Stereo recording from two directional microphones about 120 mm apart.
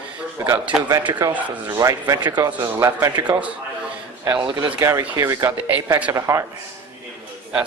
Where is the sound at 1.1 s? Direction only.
35° right (ahead or behind).